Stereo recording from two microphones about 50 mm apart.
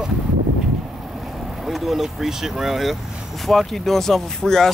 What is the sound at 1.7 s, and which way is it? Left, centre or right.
Speech, centre.